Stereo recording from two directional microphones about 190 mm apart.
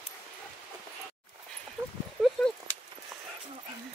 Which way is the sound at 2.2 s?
Centre (ahead or behind).